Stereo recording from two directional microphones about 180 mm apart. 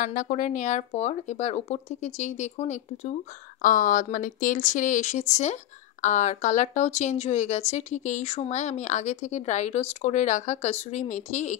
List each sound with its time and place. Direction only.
0.0 s speech: 45° left (ahead or behind)